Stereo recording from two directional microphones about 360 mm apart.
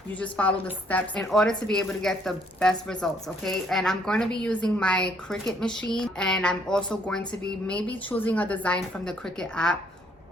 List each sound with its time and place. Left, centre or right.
0.2 s a woman's voice: centre